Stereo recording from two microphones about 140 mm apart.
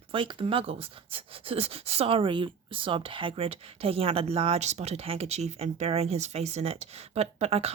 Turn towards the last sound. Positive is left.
turn(degrees=-50)  # may be behind; listen again after turning